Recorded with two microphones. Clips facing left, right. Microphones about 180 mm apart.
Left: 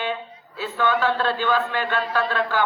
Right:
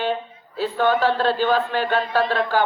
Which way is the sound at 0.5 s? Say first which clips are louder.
Right 3 dB; 50° right (ahead or behind).